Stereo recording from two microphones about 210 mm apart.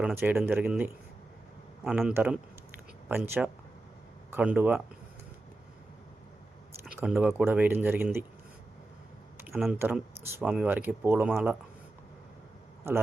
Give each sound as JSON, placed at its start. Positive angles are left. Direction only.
{"t": 0.0, "sound": "speech", "side_deg": -10}
{"t": 6.8, "sound": "speech", "side_deg": -5}
{"t": 9.7, "sound": "speech", "side_deg": -10}